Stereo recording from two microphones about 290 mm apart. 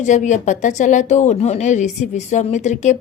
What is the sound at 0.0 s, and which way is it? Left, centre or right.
Speech, left.